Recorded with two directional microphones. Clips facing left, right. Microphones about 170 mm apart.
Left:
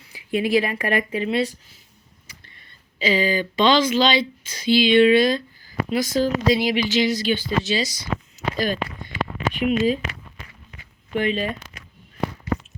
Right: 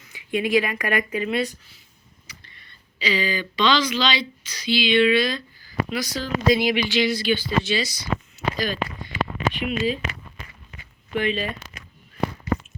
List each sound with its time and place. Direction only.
0.1 s speech: 35° left (ahead or behind)
3.0 s speech: 45° left (ahead or behind)
11.1 s speech: 40° left (ahead or behind)